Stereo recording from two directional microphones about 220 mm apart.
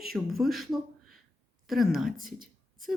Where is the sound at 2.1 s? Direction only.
40° right (ahead or behind).